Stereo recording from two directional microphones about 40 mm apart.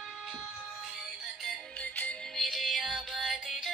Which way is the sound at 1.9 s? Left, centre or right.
Left.